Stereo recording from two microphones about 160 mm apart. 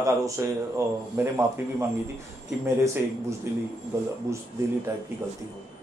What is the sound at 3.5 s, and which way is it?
Speech, 15° right (ahead or behind).